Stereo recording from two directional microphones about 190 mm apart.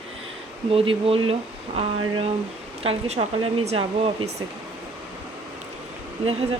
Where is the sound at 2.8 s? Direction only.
30° right (ahead or behind).